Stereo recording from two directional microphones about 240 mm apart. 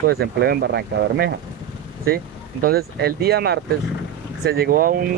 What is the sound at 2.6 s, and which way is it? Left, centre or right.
Speech, right.